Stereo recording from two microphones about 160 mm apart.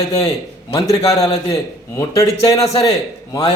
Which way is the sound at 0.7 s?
20° left (ahead or behind).